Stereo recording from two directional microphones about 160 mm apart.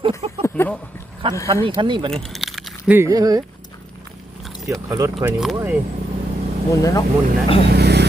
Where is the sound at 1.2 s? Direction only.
30° right (ahead or behind).